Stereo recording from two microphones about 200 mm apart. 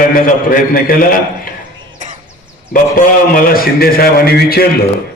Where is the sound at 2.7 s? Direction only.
45° left (ahead or behind).